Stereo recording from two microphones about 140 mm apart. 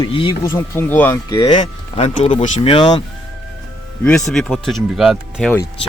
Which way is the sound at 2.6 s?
35° left (ahead or behind).